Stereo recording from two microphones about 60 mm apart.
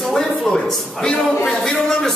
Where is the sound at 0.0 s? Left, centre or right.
Centre.